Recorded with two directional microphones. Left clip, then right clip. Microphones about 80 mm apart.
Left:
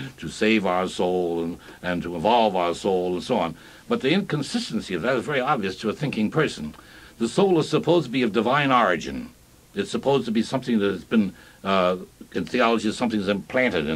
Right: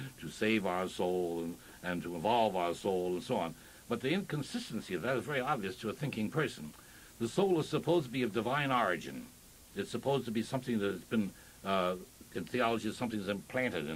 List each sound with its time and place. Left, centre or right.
0.0 s speech: right